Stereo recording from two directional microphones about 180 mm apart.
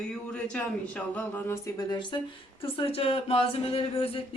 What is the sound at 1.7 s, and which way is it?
Speech, 25° left (ahead or behind).